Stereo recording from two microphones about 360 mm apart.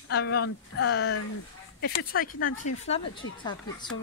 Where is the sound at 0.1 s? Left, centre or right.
Left.